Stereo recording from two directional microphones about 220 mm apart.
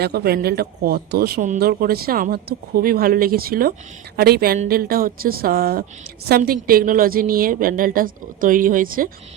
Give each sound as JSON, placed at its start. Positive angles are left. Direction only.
{"t": 0.0, "sound": "a woman's voice", "side_deg": -45}